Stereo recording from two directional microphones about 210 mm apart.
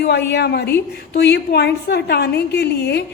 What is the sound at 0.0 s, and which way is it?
A woman's voice, 50° left (ahead or behind).